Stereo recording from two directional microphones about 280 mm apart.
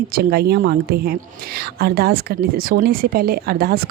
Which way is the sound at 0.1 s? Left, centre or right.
Right.